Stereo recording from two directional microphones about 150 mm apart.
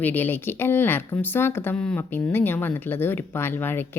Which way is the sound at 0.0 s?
15° left (ahead or behind).